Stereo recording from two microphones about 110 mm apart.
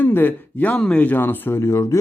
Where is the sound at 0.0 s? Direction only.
15° left (ahead or behind).